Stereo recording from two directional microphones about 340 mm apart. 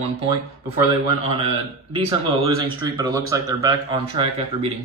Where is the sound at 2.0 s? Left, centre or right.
Centre.